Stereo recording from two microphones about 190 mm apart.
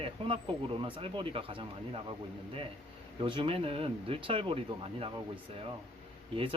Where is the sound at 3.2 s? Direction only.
30° right (ahead or behind).